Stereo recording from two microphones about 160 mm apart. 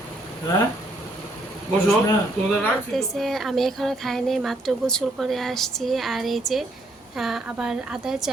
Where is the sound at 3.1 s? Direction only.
Centre (ahead or behind).